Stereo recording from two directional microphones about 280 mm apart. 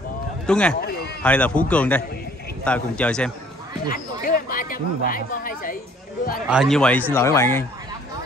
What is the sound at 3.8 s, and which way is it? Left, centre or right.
Speech, left.